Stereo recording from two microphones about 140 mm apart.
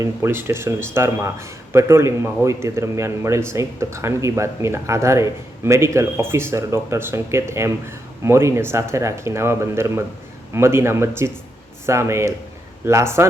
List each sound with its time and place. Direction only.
0.0 s speech: 15° right (ahead or behind)